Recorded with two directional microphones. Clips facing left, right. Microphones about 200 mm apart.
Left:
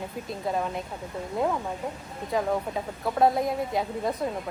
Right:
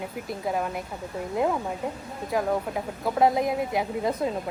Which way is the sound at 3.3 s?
20° right (ahead or behind).